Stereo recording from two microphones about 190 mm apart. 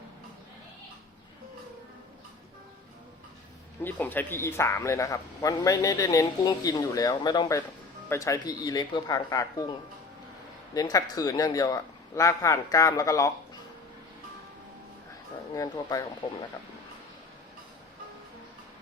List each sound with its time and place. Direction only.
3.8 s speech: 10° left (ahead or behind)
10.8 s speech: 20° left (ahead or behind)
15.5 s speech: 20° left (ahead or behind)